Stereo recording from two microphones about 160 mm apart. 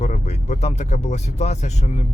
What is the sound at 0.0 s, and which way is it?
Speech, 45° left (ahead or behind).